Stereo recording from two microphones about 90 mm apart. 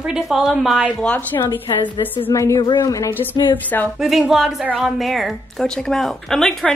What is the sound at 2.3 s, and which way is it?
Speech, 35° left (ahead or behind).